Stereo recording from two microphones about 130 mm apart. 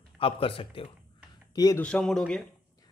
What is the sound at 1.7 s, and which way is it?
Speech, 10° left (ahead or behind).